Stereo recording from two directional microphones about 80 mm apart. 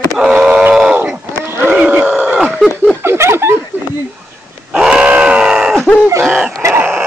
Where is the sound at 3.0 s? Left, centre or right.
Right.